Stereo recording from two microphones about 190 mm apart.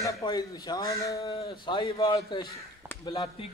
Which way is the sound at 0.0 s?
20° left (ahead or behind).